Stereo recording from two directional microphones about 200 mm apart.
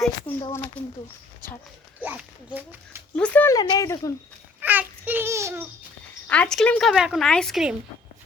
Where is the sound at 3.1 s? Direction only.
5° left (ahead or behind).